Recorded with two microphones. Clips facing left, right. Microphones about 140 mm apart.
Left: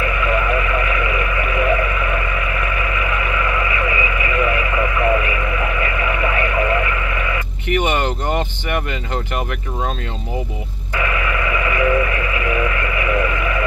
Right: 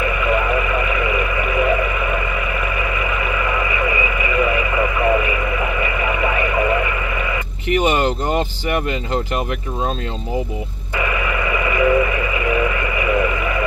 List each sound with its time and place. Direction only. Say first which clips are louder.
0.2 s vehicle: even; 15° right (ahead or behind)
3.3 s radio: even; 15° right (ahead or behind)
7.7 s a sound: right 2 dB; 30° right (ahead or behind)
11.2 s vehicle: even; 15° right (ahead or behind)